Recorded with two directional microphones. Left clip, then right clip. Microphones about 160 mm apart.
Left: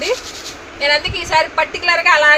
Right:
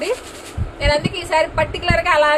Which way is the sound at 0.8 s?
10° right (ahead or behind).